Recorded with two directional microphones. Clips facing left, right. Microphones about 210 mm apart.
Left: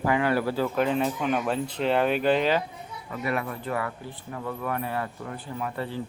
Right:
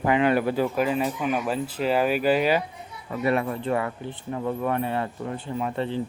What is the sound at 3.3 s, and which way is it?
Speech, 25° right (ahead or behind).